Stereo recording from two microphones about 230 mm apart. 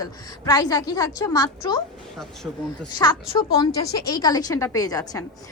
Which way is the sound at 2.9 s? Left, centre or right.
Centre.